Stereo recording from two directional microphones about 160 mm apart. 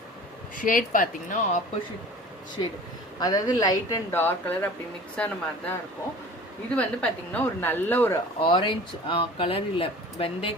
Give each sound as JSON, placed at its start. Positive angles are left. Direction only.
{"t": 0.5, "sound": "speech", "side_deg": 60}
{"t": 2.6, "sound": "a woman's voice", "side_deg": 30}
{"t": 6.7, "sound": "a woman's voice", "side_deg": 10}
{"t": 8.4, "sound": "speech", "side_deg": 30}